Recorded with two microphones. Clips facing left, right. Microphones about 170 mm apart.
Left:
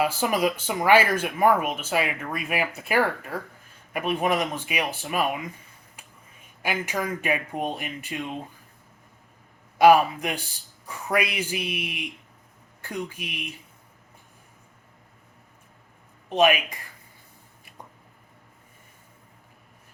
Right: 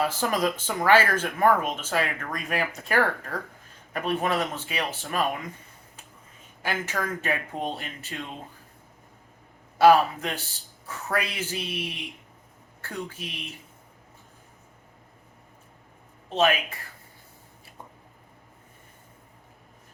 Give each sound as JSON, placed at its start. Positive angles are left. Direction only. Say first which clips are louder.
{"t": 0.0, "sound": "speech", "louder": "left 2 dB", "side_deg": 10}
{"t": 6.6, "sound": "speech", "louder": "left 2 dB", "side_deg": 10}
{"t": 9.7, "sound": "speech", "louder": "left 1 dB", "side_deg": 15}
{"t": 16.3, "sound": "speech", "louder": "left 3 dB", "side_deg": 15}